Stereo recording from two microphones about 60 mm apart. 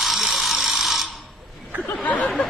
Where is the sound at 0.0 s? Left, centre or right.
Centre.